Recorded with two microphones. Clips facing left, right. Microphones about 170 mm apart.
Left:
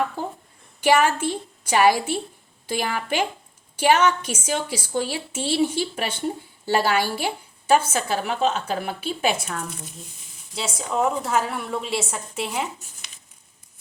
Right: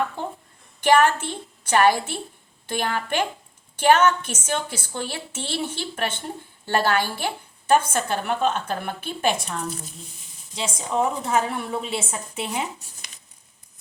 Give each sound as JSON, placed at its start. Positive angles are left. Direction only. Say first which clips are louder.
{"t": 0.8, "sound": "a woman's voice", "louder": "right 1 dB", "side_deg": 10}
{"t": 10.5, "sound": "a woman's voice", "louder": "even", "side_deg": 5}